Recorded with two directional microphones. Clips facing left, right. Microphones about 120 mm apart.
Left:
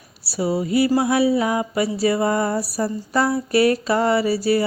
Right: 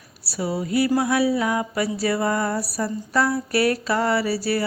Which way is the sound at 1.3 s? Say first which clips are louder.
Left 3 dB; 20° left (ahead or behind).